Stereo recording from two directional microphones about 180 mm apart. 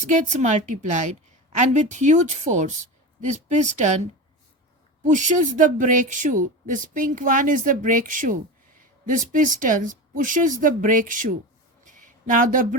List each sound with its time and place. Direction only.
0.1 s a woman's voice: 40° right (ahead or behind)
5.1 s speech: 45° right (ahead or behind)
11.9 s a sound: 45° right (ahead or behind)